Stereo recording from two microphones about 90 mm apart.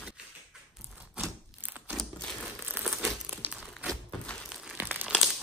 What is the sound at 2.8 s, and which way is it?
Crumpling, 25° right (ahead or behind).